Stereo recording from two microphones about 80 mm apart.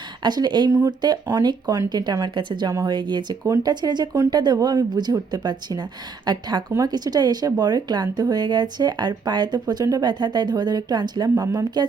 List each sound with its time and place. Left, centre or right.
0.2 s speech: right